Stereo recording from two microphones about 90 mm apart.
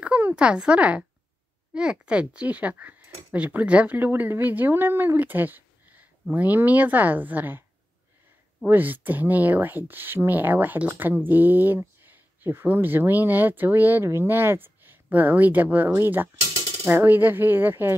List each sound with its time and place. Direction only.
0.0 s a sound: 20° right (ahead or behind)
0.4 s speech: 10° right (ahead or behind)
8.6 s speech: 20° right (ahead or behind)